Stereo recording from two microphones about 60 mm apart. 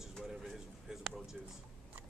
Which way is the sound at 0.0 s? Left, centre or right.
Centre.